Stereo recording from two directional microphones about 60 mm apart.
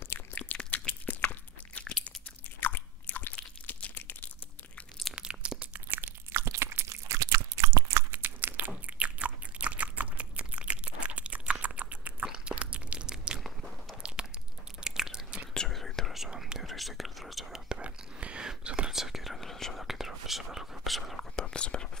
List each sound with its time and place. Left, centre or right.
0.4 s chewing: left
2.6 s crunch: left
5.1 s crunch: centre
5.9 s crunch: right
6.4 s crunch: right
8.1 s biting: right
11.6 s chewing: right
12.3 s crunch: centre
14.0 s a sound: centre
14.8 s chewing: centre
15.7 s whispering: centre
17.6 s whispering: centre
18.9 s whispering: centre
21.4 s whispering: centre